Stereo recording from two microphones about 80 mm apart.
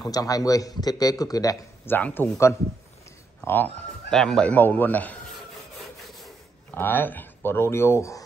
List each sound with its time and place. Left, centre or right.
0.0 s speech: left
1.9 s speech: left
3.4 s speech: left
4.1 s speech: centre
4.5 s speech: left
6.0 s filing: centre
6.7 s speech: left